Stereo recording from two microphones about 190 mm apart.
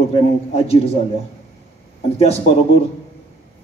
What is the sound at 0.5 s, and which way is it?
Speech, 30° left (ahead or behind).